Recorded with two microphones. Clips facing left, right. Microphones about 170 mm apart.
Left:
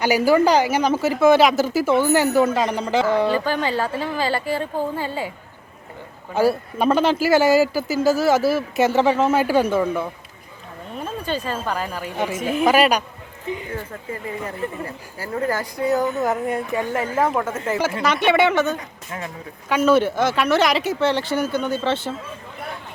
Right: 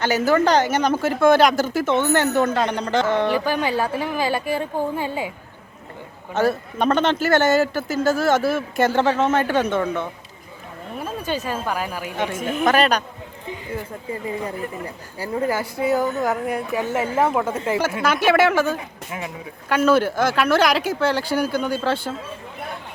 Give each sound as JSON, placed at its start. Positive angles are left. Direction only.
{"t": 0.0, "sound": "a man's voice", "side_deg": 10}
{"t": 3.2, "sound": "speech", "side_deg": -10}
{"t": 6.3, "sound": "a man's voice", "side_deg": 5}
{"t": 11.0, "sound": "speech", "side_deg": -10}
{"t": 12.2, "sound": "a man's voice", "side_deg": 5}
{"t": 13.7, "sound": "speech", "side_deg": -15}